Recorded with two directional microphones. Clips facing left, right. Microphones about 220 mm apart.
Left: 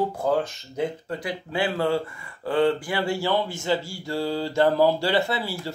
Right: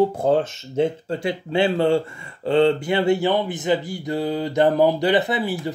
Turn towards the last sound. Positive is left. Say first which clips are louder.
# right 4 dB
turn(degrees=-20)  # may be behind; listen again after turning